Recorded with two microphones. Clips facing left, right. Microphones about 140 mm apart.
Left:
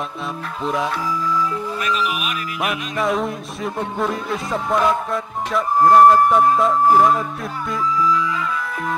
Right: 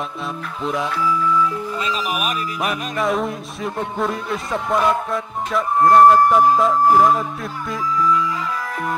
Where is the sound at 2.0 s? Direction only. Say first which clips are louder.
Right 2 dB; 40° right (ahead or behind).